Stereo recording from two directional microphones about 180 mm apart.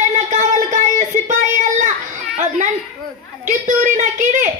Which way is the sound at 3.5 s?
45° right (ahead or behind).